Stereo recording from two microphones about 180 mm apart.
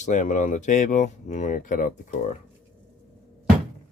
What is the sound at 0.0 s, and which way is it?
Speech, 45° left (ahead or behind).